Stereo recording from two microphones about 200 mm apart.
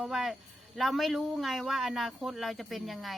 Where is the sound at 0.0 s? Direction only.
Centre (ahead or behind).